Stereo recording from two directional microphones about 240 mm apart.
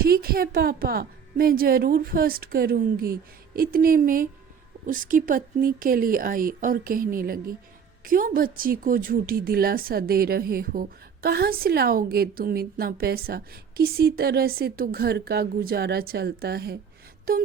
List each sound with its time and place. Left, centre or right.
0.0 s speech: right